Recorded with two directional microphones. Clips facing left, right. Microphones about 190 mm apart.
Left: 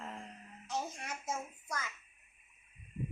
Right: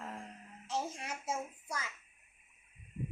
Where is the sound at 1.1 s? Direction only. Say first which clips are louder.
Right 1 dB; 10° right (ahead or behind).